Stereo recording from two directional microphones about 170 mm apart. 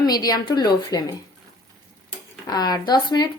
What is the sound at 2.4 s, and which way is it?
Speech, 25° left (ahead or behind).